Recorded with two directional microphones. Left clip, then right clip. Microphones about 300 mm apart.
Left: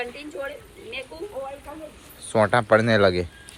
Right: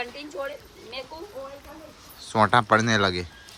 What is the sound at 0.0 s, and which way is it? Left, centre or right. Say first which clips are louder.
Speech: left 1 dB; right.